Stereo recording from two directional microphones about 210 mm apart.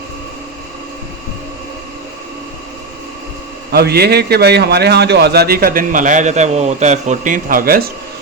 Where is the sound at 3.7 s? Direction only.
50° right (ahead or behind).